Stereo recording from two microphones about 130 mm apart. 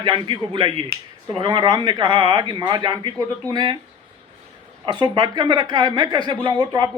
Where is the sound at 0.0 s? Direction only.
40° right (ahead or behind).